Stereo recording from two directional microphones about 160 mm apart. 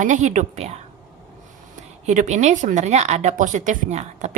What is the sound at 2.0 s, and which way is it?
A woman's voice, 50° right (ahead or behind).